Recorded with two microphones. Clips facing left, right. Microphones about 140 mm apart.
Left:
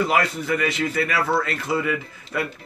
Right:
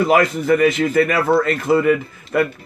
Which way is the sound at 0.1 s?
45° right (ahead or behind).